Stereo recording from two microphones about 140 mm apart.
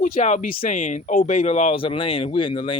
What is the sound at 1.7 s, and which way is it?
Speech, 40° left (ahead or behind).